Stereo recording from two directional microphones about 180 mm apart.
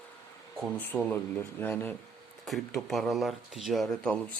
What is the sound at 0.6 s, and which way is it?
Speech, 10° left (ahead or behind).